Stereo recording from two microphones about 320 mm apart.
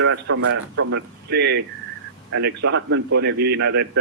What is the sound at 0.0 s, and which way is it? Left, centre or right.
A man's voice, right.